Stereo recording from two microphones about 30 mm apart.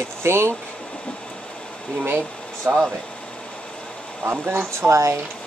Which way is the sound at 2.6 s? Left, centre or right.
Right.